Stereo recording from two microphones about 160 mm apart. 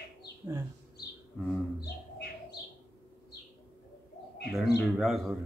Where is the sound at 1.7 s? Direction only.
85° left.